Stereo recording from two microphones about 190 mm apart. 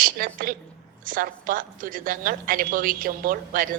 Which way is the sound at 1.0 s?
45° right (ahead or behind).